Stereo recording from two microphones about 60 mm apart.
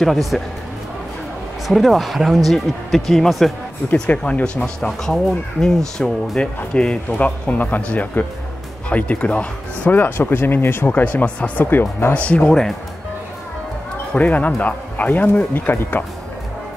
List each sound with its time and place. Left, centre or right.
0.0 s speech: centre
1.7 s speech: centre
3.9 s speech: centre
4.8 s speech: centre
11.6 s speech: left
12.1 s speech: left
14.1 s speech: left